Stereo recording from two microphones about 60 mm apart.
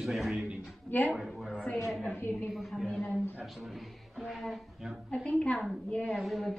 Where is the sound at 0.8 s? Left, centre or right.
Left.